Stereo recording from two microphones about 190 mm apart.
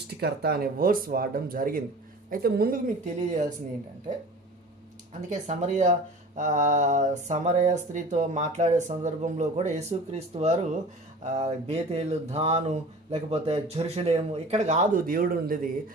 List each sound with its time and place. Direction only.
0.2 s speech: 55° right (ahead or behind); by 3.4 s 40° right (ahead or behind)
5.3 s speech: 40° right (ahead or behind)